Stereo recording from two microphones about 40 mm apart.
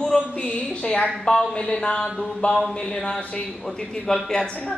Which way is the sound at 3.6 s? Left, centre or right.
Centre.